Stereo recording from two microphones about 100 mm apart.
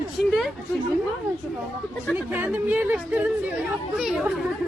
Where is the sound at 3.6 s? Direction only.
5° right (ahead or behind).